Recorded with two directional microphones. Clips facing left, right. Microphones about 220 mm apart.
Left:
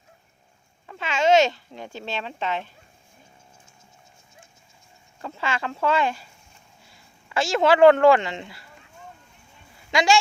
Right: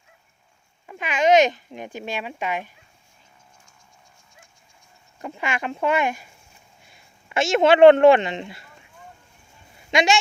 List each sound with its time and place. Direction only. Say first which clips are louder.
0.9 s a child's voice: right 1 dB; 15° right (ahead or behind)
5.2 s a child's voice: right 1 dB; 15° right (ahead or behind)
9.7 s a sound: right 1 dB; 20° right (ahead or behind)